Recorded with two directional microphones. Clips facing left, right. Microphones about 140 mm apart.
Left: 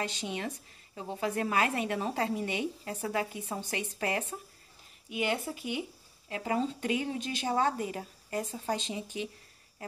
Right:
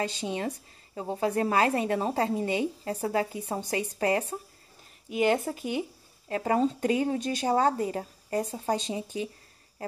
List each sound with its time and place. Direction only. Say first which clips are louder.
0.0 s speech: right 5 dB; 35° right (ahead or behind)